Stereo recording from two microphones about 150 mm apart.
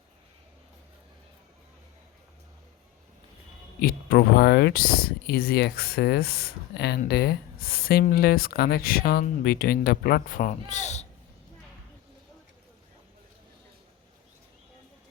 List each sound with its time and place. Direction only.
3.8 s speech: 70° left (ahead or behind); by 11.0 s 50° left (ahead or behind)